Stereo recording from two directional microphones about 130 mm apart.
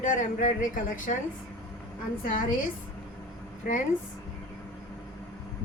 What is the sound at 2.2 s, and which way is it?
Speech, 90° left.